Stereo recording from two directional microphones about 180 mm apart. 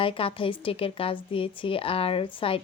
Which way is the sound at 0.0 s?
30° left (ahead or behind).